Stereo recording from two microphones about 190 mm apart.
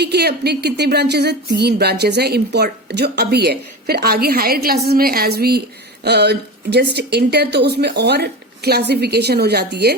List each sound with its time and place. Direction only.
0.0 s speech: 60° right (ahead or behind)